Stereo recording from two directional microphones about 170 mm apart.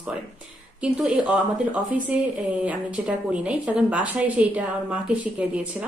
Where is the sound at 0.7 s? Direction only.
5° right (ahead or behind).